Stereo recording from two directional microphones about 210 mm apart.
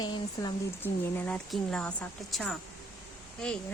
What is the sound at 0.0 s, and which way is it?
Speech, 20° left (ahead or behind).